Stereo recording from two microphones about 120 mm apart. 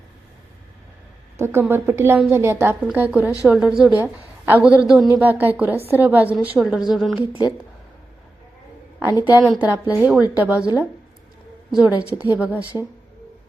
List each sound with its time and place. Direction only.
1.4 s a woman's voice: 20° right (ahead or behind)
2.8 s a woman's voice: 10° right (ahead or behind)
5.1 s a woman's voice: 15° right (ahead or behind)
9.4 s a woman's voice: 10° right (ahead or behind)
11.7 s a woman's voice: 10° right (ahead or behind)